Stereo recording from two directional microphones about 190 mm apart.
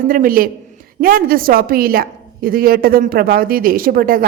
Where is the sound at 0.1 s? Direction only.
50° right (ahead or behind).